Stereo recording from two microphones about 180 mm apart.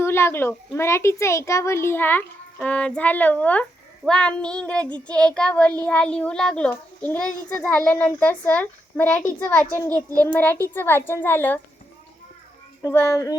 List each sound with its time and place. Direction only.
0.0 s a child's voice: 15° left (ahead or behind)
9.9 s a child's voice: 20° right (ahead or behind)
10.3 s a child's voice: 10° left (ahead or behind)
12.8 s a child's voice: 15° left (ahead or behind)